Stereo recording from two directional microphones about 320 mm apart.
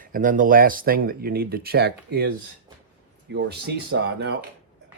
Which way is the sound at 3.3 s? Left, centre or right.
Right.